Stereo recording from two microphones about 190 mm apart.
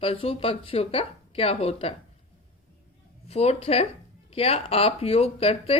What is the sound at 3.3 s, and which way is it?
Speech, 30° left (ahead or behind).